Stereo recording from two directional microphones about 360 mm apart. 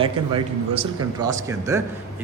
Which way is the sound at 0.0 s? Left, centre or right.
Centre.